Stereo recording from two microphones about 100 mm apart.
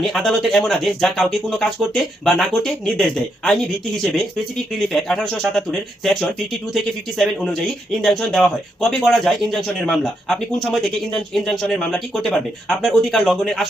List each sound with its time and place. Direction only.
0.0 s speech: centre (ahead or behind)